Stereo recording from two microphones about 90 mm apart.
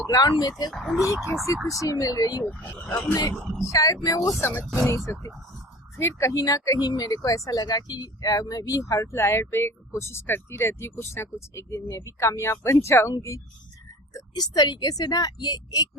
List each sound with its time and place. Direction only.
0.1 s speech: 50° left (ahead or behind)
0.7 s speech: centre (ahead or behind)
1.0 s speech: 35° left (ahead or behind)
2.4 s speech: 15° left (ahead or behind)
3.1 s speech: 40° left (ahead or behind)
3.3 s speech: centre (ahead or behind)
3.7 s speech: 40° left (ahead or behind)
14.3 s speech: 50° left (ahead or behind)